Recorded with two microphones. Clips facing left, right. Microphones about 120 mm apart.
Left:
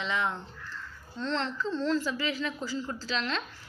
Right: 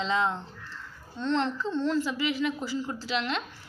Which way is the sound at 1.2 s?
20° right (ahead or behind).